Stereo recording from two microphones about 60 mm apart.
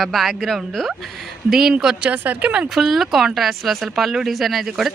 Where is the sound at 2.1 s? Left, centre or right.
Right.